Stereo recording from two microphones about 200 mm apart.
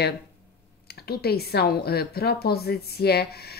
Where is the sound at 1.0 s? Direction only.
50° left (ahead or behind).